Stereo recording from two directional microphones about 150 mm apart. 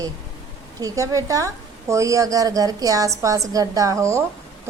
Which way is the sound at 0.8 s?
20° right (ahead or behind).